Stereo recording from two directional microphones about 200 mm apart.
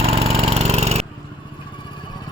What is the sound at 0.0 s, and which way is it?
Lawn mower, 30° right (ahead or behind).